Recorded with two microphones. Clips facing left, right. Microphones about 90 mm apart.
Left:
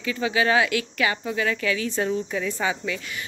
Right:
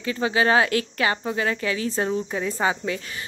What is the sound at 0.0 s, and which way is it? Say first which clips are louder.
Speech: right 1 dB; 30° right (ahead or behind).